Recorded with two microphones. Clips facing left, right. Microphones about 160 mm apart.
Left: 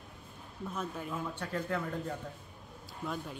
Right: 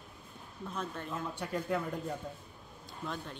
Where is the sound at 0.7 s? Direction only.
5° left (ahead or behind).